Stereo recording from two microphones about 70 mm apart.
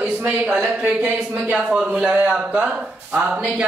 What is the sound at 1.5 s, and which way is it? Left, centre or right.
Speech, centre.